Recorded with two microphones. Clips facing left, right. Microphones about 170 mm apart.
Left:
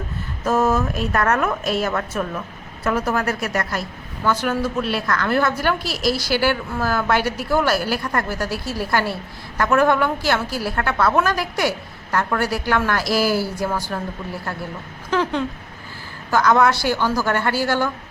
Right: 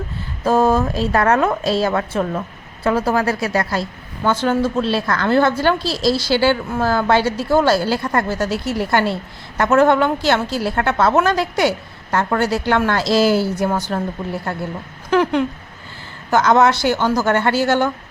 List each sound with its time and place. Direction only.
0.4 s a woman's voice: 30° right (ahead or behind)